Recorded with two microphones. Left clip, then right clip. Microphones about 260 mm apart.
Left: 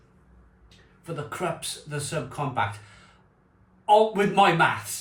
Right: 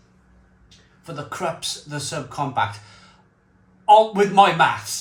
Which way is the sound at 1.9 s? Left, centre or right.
Centre.